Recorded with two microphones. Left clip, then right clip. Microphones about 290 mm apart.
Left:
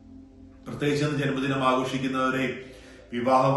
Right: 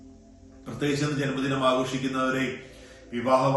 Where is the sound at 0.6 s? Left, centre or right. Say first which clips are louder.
Left 1 dB; centre.